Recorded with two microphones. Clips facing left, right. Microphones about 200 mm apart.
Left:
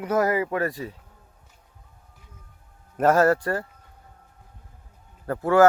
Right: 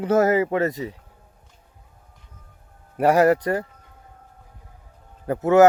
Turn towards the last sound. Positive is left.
turn(degrees=-20)  # may be behind; listen again after turning